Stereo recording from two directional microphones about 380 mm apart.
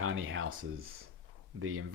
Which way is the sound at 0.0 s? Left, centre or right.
Right.